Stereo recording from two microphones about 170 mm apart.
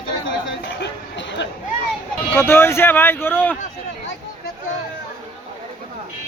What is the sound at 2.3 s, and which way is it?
Speech, 15° left (ahead or behind).